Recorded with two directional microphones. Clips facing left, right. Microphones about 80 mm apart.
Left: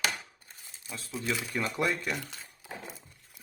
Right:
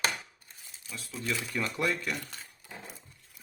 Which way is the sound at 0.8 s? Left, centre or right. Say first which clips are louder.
Left 2 dB; left.